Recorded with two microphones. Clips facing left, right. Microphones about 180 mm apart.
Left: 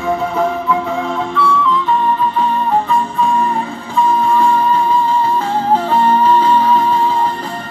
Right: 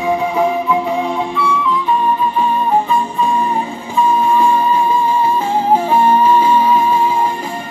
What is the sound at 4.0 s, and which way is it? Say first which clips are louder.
Music: even; 15° right (ahead or behind).